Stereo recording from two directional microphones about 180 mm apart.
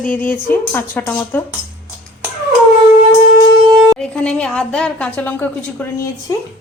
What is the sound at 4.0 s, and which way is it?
A woman's voice, 5° left (ahead or behind).